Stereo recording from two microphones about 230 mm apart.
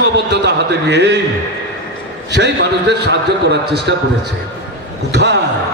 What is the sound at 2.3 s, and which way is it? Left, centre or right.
Speech, right.